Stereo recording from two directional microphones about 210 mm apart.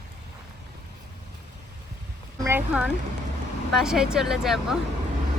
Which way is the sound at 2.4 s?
10° right (ahead or behind).